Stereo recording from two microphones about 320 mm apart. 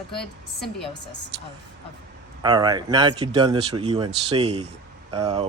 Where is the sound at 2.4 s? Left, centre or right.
Centre.